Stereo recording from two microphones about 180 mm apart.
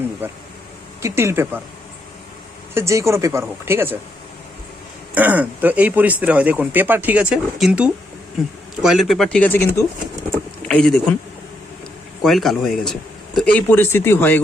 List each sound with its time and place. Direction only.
0.2 s speech: 10° right (ahead or behind)
2.7 s speech: 15° right (ahead or behind)
5.1 s speech: 10° right (ahead or behind); by 9.8 s 15° left (ahead or behind)
10.7 s speech: 5° left (ahead or behind)
12.2 s speech: centre (ahead or behind)